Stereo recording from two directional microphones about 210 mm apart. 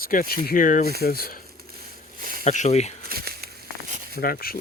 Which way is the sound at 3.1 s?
45° right (ahead or behind).